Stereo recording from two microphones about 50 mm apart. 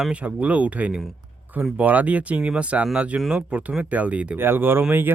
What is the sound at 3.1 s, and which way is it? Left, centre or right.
Speech, centre.